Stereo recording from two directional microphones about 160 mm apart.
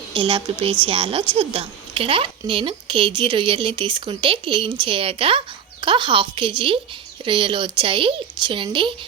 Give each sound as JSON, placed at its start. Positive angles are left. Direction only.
{"t": 0.1, "sound": "speech", "side_deg": -30}